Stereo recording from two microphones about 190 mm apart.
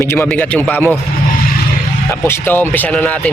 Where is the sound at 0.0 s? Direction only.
15° left (ahead or behind).